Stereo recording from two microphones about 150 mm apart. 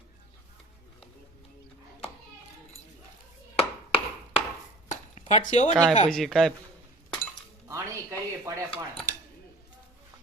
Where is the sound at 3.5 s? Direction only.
40° left (ahead or behind).